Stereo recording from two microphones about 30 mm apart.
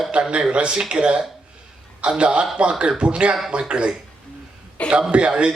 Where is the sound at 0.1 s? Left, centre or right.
Right.